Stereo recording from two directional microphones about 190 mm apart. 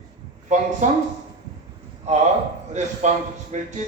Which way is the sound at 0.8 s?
40° right (ahead or behind).